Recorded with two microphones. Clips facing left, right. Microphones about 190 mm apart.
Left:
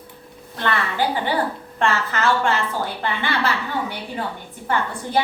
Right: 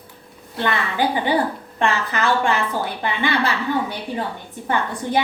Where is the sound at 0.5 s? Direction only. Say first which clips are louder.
Right 1 dB; 15° right (ahead or behind).